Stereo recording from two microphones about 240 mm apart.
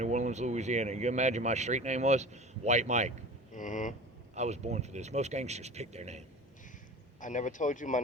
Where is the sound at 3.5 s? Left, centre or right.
Left.